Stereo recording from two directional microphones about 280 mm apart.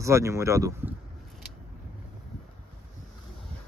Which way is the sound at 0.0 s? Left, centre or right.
Centre.